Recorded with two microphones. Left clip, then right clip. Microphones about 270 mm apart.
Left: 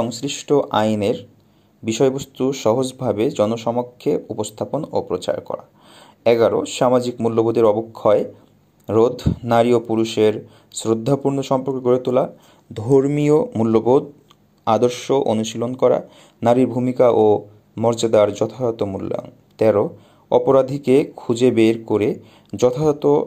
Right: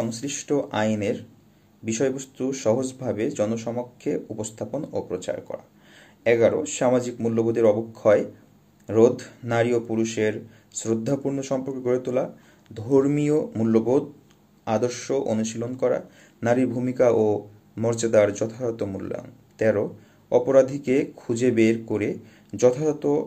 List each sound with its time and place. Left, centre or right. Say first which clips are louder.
0.1 s speech: left 7 dB; left
6.2 s speech: left 4 dB; left